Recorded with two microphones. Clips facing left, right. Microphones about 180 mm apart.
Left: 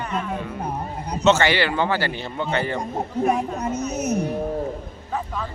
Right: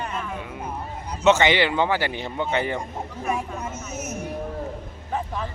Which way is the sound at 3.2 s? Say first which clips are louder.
Left 4 dB; 35° left (ahead or behind).